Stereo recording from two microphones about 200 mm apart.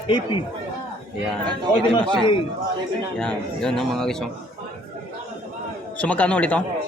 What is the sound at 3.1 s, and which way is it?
Speech, 5° left (ahead or behind).